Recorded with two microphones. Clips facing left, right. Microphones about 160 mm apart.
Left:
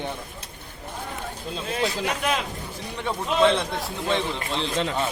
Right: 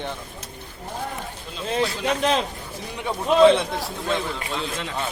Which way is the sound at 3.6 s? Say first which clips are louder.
Right 1 dB; centre (ahead or behind).